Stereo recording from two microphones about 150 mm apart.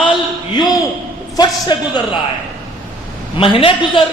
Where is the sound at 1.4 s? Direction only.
30° left (ahead or behind).